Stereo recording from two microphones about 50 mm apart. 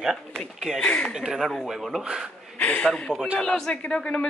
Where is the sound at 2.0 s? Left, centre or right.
Centre.